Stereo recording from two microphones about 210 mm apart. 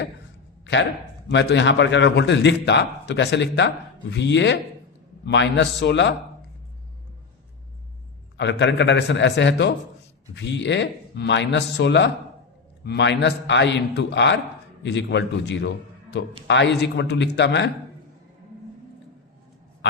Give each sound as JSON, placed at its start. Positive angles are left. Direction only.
{"t": 0.6, "sound": "a sound", "side_deg": 55}
{"t": 1.3, "sound": "a man's voice", "side_deg": 55}
{"t": 8.4, "sound": "a man's voice", "side_deg": 55}